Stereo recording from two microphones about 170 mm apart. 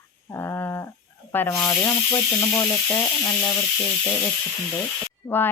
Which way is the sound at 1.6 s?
20° left (ahead or behind).